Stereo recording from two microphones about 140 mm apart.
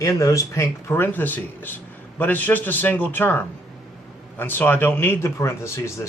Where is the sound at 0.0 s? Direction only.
25° left (ahead or behind).